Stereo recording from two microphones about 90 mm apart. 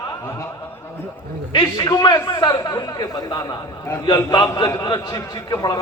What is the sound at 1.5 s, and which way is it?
A man's voice, 55° left (ahead or behind).